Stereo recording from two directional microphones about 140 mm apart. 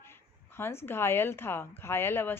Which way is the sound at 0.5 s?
15° left (ahead or behind).